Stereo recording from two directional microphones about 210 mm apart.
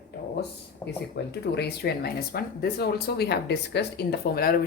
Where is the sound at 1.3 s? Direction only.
50° left (ahead or behind).